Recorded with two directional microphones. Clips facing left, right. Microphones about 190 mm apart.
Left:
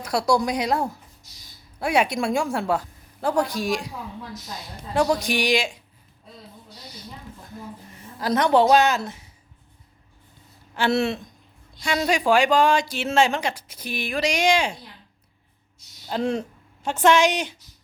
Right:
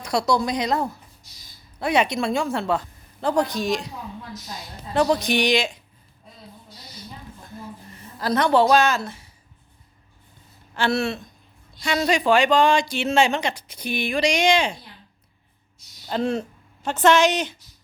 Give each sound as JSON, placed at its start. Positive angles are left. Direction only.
{"t": 0.0, "sound": "speech", "side_deg": 5}
{"t": 4.9, "sound": "speech", "side_deg": 10}
{"t": 7.9, "sound": "a woman's voice", "side_deg": 15}
{"t": 10.8, "sound": "speech", "side_deg": 15}
{"t": 11.9, "sound": "speech", "side_deg": 10}
{"t": 16.0, "sound": "speech", "side_deg": 10}